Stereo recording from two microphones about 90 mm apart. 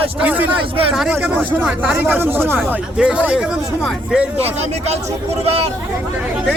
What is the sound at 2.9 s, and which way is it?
Speech, 10° right (ahead or behind).